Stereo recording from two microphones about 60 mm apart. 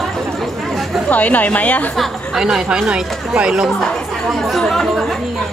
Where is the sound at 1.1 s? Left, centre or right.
Left.